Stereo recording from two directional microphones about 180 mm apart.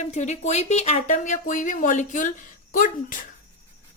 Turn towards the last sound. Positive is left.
turn(degrees=50)  # may be behind; listen again after turning